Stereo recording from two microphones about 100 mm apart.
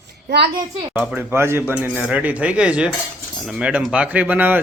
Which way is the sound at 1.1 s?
20° right (ahead or behind).